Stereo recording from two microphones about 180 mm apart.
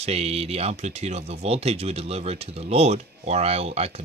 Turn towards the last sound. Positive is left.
turn(degrees=-35)  # may be behind; listen again after turning